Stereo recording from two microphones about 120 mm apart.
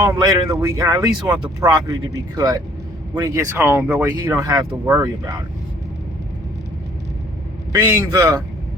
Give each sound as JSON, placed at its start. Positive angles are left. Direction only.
{"t": 0.4, "sound": "speech", "side_deg": -25}
{"t": 3.6, "sound": "speech", "side_deg": -15}
{"t": 7.7, "sound": "speech", "side_deg": -30}